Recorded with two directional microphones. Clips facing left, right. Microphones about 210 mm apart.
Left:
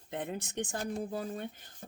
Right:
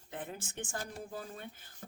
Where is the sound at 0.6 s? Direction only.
35° left (ahead or behind).